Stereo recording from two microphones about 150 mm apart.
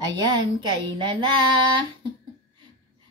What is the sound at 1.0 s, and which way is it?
Speech, 30° right (ahead or behind).